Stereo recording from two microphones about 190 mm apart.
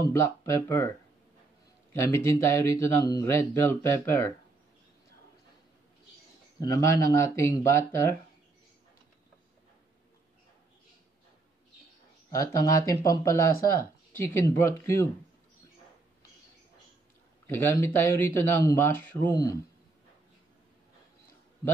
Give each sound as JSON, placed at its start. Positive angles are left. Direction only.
{"t": 0.1, "sound": "speech", "side_deg": 15}
{"t": 2.0, "sound": "speech", "side_deg": 15}
{"t": 6.6, "sound": "speech", "side_deg": 20}
{"t": 12.3, "sound": "speech", "side_deg": 15}
{"t": 17.5, "sound": "speech", "side_deg": 15}